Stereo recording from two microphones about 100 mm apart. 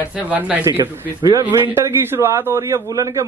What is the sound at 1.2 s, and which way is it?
Speech, 40° right (ahead or behind).